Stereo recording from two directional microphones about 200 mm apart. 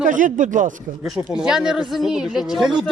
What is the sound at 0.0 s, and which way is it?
Speech, 40° right (ahead or behind).